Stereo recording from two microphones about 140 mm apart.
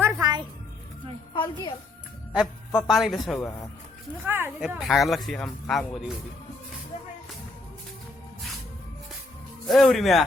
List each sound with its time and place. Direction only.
0.2 s music: 30° right (ahead or behind)
1.3 s a woman's voice: 35° left (ahead or behind)
2.3 s speech: 5° right (ahead or behind)
4.3 s speech: 15° right (ahead or behind)
4.8 s speech: centre (ahead or behind)
9.6 s speech: centre (ahead or behind)